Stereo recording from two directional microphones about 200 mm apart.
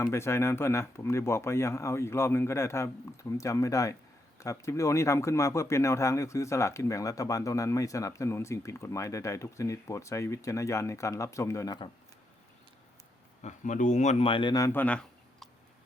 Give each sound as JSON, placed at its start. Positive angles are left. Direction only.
{"t": 0.0, "sound": "speech", "side_deg": 15}
{"t": 13.4, "sound": "a man's voice", "side_deg": 40}